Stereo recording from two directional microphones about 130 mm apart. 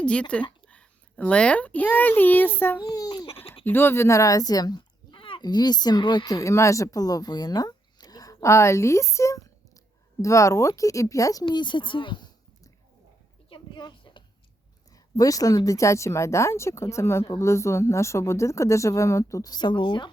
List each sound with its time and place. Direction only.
0.0 s a child's voice: 10° left (ahead or behind)
2.8 s speech: 25° left (ahead or behind)
3.6 s speech: 15° left (ahead or behind); by 12.7 s 35° left (ahead or behind)
13.5 s a sound: 35° left (ahead or behind)
14.9 s speech: 30° left (ahead or behind)